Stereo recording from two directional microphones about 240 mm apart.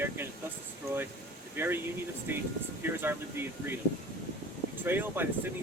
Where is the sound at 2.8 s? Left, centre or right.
Centre.